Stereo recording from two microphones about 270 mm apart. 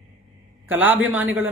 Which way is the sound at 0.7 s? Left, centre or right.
Centre.